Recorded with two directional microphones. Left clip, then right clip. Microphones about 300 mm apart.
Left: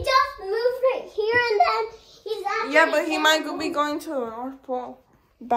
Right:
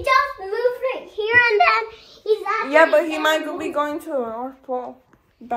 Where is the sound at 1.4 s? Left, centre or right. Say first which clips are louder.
Right 6 dB; centre.